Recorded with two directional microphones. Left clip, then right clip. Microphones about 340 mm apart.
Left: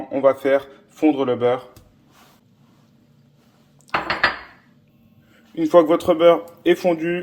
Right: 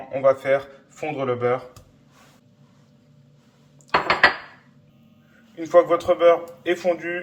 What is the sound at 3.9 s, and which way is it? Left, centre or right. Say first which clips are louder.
Dishes: right 2 dB; left.